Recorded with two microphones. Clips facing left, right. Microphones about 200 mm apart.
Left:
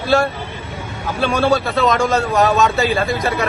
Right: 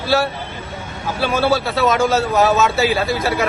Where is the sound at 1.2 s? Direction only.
5° right (ahead or behind).